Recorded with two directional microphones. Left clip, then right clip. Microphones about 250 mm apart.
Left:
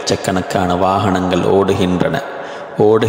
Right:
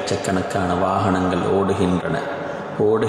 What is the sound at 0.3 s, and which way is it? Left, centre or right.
A man's voice, left.